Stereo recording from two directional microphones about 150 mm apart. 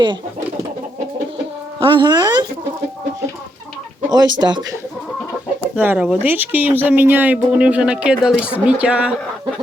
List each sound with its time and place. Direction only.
1.8 s speech: 30° right (ahead or behind)
4.1 s speech: 30° right (ahead or behind)
5.7 s speech: 10° right (ahead or behind)